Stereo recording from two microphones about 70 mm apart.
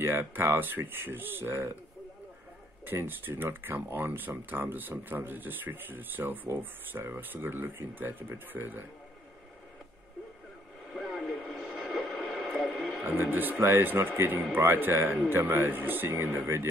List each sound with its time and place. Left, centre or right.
0.0 s speech: right
2.8 s speech: right
11.0 s radio: centre
11.4 s radio: right
14.5 s speech: right